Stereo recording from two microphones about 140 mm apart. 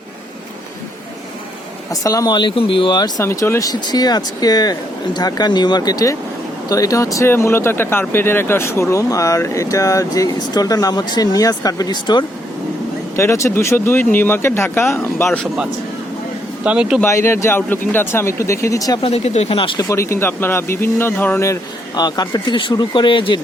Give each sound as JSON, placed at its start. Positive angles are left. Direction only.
{"t": 1.9, "sound": "speech", "side_deg": 25}
{"t": 13.1, "sound": "speech", "side_deg": 20}
{"t": 16.6, "sound": "speech", "side_deg": -5}
{"t": 17.0, "sound": "speech", "side_deg": 20}
{"t": 19.0, "sound": "speech", "side_deg": 45}
{"t": 19.9, "sound": "speech", "side_deg": 20}